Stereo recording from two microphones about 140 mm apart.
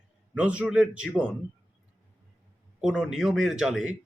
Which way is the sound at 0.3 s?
10° right (ahead or behind).